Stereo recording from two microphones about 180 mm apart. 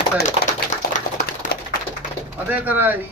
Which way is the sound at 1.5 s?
60° left (ahead or behind).